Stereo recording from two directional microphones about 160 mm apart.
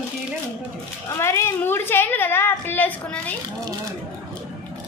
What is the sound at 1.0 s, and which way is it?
A woman's voice, 15° left (ahead or behind).